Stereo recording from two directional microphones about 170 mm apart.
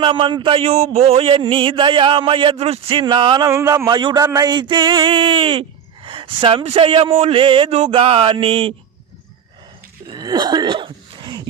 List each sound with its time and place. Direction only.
0.0 s speech: 30° right (ahead or behind)
10.1 s cough: 25° right (ahead or behind)